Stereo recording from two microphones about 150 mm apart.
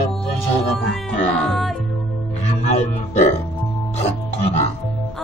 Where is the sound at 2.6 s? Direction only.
50° left (ahead or behind).